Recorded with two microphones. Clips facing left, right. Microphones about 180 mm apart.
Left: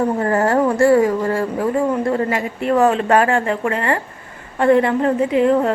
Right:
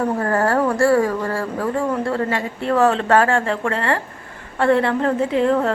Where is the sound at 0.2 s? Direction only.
20° left (ahead or behind).